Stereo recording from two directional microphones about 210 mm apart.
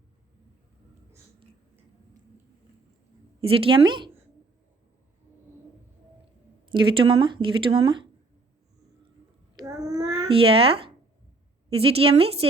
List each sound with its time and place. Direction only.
3.4 s speech: 25° right (ahead or behind)
6.7 s speech: 25° right (ahead or behind)
9.6 s child singing: 15° right (ahead or behind)
10.2 s speech: 25° right (ahead or behind)